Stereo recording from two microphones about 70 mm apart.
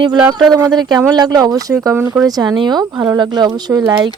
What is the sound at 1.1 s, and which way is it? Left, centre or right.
Speech, right.